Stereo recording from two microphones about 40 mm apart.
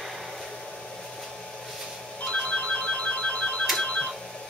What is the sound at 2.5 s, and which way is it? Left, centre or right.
Ringtone, left.